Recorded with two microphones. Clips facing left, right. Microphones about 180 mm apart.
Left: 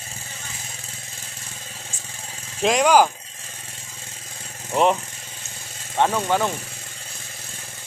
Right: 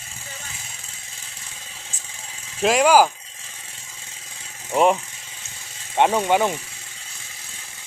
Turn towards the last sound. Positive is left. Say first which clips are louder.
# right 3 dB
turn(degrees=-15)  # may be behind; listen again after turning